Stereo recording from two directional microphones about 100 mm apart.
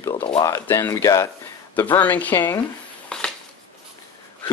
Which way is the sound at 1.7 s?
20° left (ahead or behind).